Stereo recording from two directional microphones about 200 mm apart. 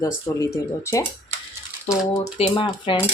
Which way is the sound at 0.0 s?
15° left (ahead or behind).